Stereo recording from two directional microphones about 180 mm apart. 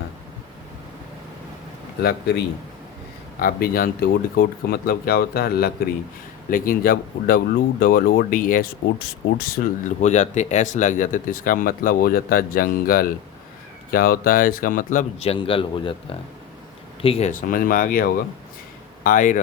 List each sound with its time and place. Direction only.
3.4 s speech: 55° left (ahead or behind)
10.0 s speech: 40° left (ahead or behind)
17.5 s speech: 50° left (ahead or behind)